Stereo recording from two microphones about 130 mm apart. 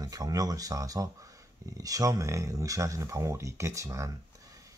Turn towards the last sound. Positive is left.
turn(degrees=-25)  # may be behind; listen again after turning